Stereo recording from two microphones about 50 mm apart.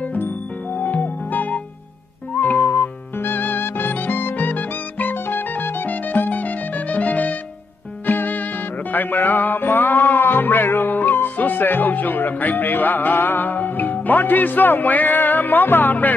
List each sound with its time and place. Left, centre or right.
0.7 s music: left